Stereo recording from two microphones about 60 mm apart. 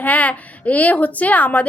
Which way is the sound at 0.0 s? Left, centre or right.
Left.